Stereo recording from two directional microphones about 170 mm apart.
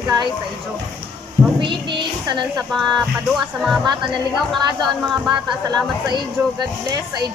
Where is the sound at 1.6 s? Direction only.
30° right (ahead or behind).